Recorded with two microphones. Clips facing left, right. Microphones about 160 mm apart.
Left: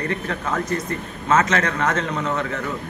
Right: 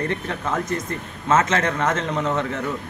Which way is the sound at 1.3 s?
25° right (ahead or behind).